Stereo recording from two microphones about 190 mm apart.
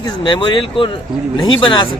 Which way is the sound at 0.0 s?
25° left (ahead or behind).